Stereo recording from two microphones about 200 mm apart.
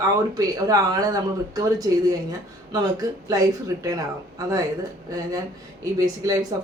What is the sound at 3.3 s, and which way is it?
Speech, 15° right (ahead or behind).